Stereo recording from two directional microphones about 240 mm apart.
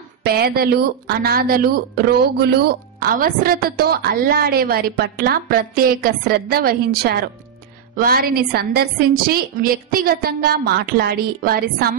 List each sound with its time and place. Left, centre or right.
0.2 s speech: right